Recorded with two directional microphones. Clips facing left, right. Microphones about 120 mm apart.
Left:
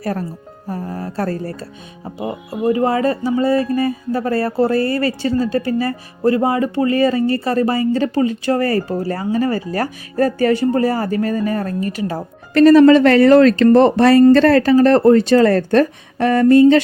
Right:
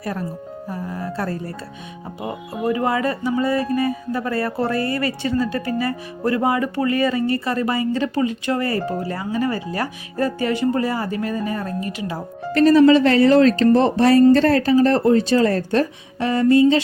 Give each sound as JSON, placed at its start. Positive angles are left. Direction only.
{"t": 0.0, "sound": "speech", "side_deg": 45}
{"t": 2.1, "sound": "speech", "side_deg": 30}
{"t": 12.5, "sound": "speech", "side_deg": 70}